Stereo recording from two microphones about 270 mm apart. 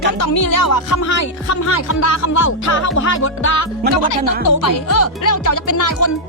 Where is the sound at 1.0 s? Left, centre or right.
Left.